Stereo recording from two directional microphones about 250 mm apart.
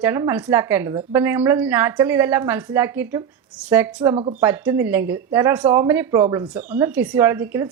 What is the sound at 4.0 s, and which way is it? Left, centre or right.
Speech, centre.